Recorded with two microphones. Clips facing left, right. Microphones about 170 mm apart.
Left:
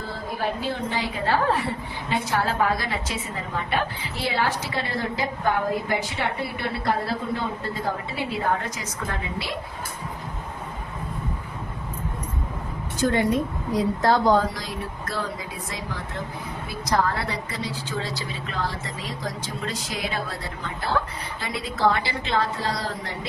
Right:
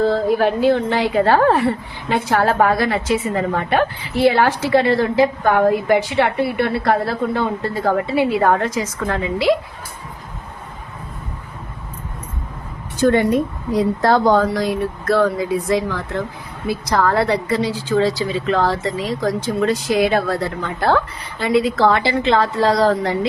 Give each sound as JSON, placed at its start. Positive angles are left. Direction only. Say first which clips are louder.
{"t": 0.0, "sound": "a woman's voice", "louder": "right 13 dB", "side_deg": -80}
{"t": 13.0, "sound": "a woman's voice", "louder": "right 7 dB", "side_deg": -65}
{"t": 15.7, "sound": "a woman's voice", "louder": "right 13 dB", "side_deg": -90}
{"t": 19.2, "sound": "a woman's voice", "louder": "right 14 dB", "side_deg": -65}
{"t": 21.4, "sound": "a woman's voice", "louder": "right 9 dB", "side_deg": -90}